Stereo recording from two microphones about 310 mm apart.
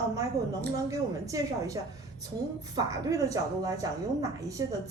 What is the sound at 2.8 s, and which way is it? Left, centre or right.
A man's voice, centre.